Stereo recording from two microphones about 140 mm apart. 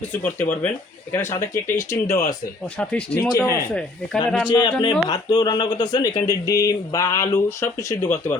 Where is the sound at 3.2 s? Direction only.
25° left (ahead or behind).